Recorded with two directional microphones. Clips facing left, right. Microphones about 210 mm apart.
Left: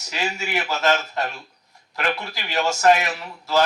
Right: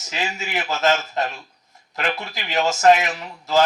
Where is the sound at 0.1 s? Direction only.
20° right (ahead or behind).